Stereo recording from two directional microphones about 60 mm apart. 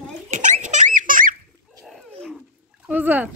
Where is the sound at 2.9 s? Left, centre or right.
Right.